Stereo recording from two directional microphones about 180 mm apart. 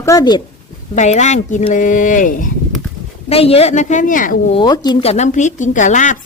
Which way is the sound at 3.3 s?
35° left (ahead or behind).